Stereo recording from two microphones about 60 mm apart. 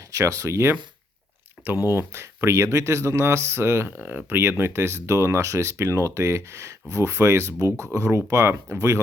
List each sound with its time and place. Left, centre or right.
0.1 s speech: right
1.9 s speech: right